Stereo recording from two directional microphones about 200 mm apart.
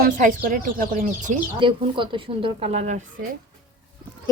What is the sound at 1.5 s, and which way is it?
Speech, 25° right (ahead or behind).